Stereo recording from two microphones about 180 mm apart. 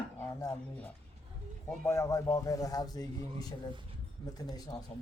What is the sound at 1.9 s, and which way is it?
A man's voice, 15° left (ahead or behind).